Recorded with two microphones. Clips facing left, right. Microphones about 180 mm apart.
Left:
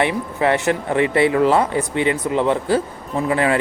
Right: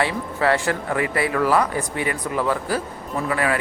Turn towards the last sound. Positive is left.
turn(degrees=25)  # may be behind; listen again after turning